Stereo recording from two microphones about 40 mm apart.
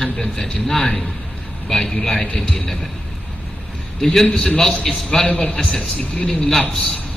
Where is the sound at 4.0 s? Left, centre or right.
Centre.